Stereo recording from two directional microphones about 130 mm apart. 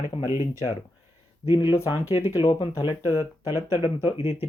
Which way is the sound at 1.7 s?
25° left (ahead or behind).